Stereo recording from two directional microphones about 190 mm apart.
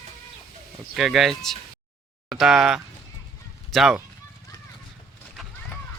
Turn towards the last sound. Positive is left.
turn(degrees=0)  # may be behind; listen again after turning